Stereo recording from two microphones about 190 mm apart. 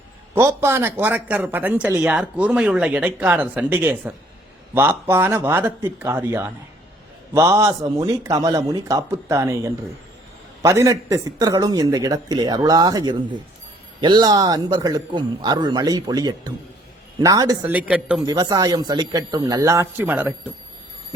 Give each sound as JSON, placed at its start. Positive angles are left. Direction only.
{"t": 0.3, "sound": "a man's voice", "side_deg": -15}
{"t": 17.7, "sound": "speech", "side_deg": -5}
{"t": 18.3, "sound": "a man's voice", "side_deg": -20}